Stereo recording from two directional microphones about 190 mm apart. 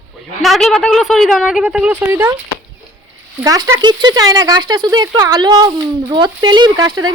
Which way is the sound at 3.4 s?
20° right (ahead or behind).